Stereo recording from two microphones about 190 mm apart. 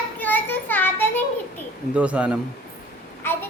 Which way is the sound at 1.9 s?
5° right (ahead or behind).